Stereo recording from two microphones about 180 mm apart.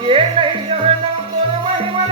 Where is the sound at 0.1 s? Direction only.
30° right (ahead or behind).